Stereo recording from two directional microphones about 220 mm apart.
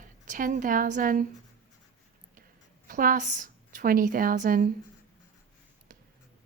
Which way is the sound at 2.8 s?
40° right (ahead or behind).